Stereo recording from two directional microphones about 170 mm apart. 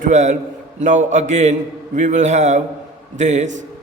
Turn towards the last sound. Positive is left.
turn(degrees=-45)  # may be behind; listen again after turning